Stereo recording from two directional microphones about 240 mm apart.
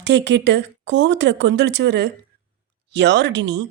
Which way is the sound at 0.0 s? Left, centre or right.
Right.